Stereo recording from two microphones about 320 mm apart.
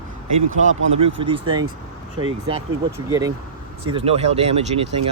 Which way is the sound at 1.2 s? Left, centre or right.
Centre.